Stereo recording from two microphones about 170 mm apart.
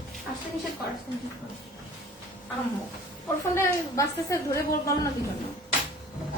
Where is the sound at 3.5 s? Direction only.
20° left (ahead or behind).